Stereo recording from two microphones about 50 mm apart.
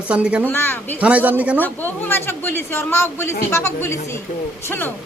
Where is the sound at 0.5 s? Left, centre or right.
Left.